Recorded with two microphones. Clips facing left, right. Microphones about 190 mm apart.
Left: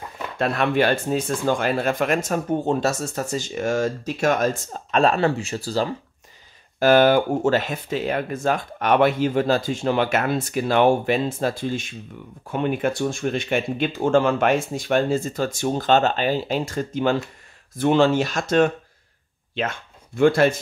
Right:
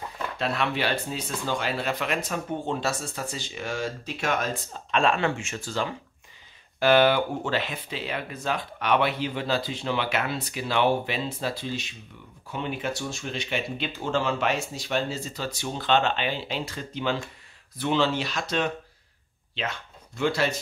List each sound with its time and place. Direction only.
0.4 s speech: 50° left (ahead or behind)